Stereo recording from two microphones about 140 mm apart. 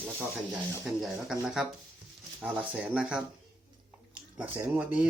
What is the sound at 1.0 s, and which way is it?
Speech, 5° right (ahead or behind).